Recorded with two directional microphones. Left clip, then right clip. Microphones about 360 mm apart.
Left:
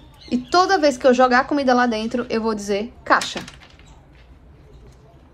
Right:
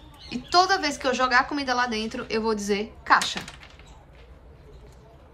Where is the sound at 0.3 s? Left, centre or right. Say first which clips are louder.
Left 4 dB; centre.